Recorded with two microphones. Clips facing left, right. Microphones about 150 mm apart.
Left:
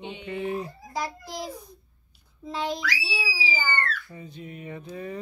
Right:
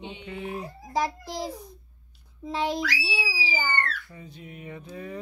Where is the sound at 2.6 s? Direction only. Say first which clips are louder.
Right 2 dB; centre (ahead or behind).